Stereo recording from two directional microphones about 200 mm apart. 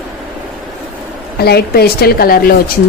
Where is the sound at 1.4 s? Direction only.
50° left (ahead or behind).